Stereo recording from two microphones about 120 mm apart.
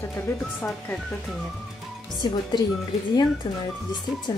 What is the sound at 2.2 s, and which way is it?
Speech, 40° left (ahead or behind).